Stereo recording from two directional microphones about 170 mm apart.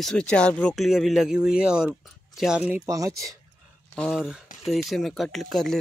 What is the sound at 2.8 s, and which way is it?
Speech, 20° right (ahead or behind).